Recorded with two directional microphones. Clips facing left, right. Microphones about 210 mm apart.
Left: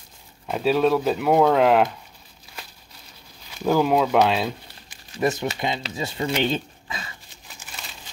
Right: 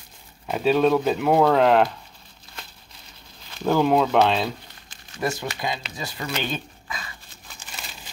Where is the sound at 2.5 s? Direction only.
10° left (ahead or behind).